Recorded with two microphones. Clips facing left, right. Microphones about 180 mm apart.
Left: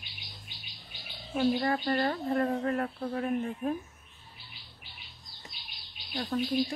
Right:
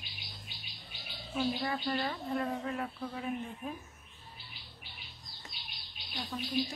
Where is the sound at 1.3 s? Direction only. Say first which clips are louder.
Left 6 dB; 45° left (ahead or behind).